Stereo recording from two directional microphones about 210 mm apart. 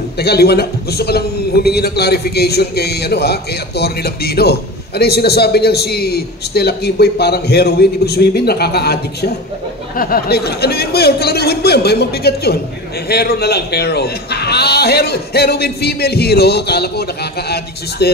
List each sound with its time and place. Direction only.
0.2 s a man's voice: 50° left (ahead or behind)